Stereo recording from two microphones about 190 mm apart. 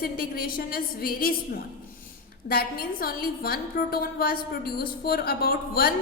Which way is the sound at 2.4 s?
50° left (ahead or behind).